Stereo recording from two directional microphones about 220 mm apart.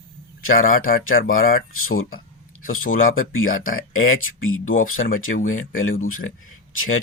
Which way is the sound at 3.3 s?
70° left (ahead or behind).